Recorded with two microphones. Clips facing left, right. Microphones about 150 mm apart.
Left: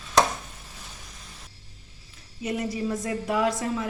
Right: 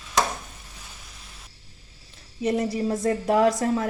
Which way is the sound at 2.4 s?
35° right (ahead or behind).